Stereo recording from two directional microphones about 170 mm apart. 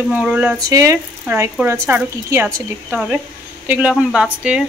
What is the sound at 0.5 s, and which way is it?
Speech, 20° right (ahead or behind).